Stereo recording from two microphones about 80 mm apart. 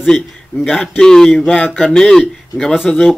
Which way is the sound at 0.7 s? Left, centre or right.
Centre.